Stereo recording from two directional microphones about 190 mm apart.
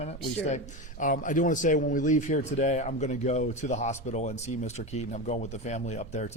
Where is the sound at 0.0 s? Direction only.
35° left (ahead or behind).